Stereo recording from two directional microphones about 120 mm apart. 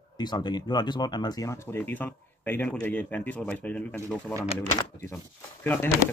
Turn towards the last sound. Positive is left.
turn(degrees=20)  # may be behind; listen again after turning